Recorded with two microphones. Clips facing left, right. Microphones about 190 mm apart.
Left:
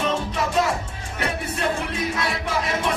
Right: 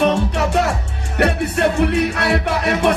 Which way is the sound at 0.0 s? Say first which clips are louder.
Right 7 dB; 70° right (ahead or behind).